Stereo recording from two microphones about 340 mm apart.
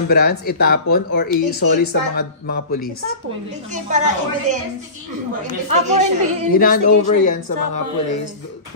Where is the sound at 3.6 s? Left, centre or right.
Right.